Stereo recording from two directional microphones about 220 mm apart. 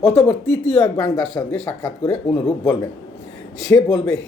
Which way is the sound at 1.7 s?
15° left (ahead or behind).